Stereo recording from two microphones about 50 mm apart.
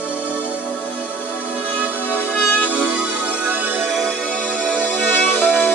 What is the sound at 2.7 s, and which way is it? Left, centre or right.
Music, right.